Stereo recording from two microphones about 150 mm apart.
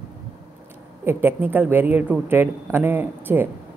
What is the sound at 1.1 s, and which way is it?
A man's voice, 15° right (ahead or behind).